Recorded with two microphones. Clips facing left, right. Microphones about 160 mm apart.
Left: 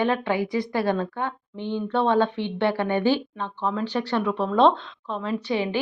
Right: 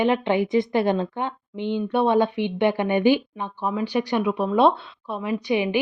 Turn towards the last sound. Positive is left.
turn(degrees=-15)  # may be behind; listen again after turning